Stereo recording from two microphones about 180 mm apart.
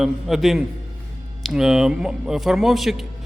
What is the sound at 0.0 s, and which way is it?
A man's voice, centre (ahead or behind).